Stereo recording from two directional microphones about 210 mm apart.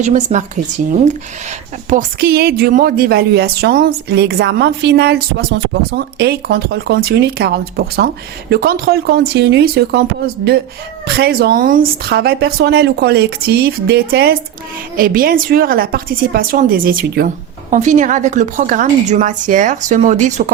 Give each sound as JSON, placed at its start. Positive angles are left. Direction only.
{"t": 0.0, "sound": "a woman's voice", "side_deg": -35}
{"t": 1.9, "sound": "a woman's voice", "side_deg": -40}